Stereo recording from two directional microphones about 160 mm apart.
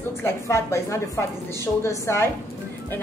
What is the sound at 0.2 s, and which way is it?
A woman's voice, 20° left (ahead or behind).